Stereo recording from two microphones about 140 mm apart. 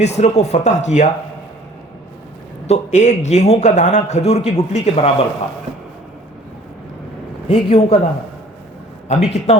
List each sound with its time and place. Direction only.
0.0 s speech: 55° left (ahead or behind)
2.6 s a man's voice: 55° left (ahead or behind)
7.4 s a man's voice: 45° left (ahead or behind)
9.0 s a man's voice: 50° left (ahead or behind)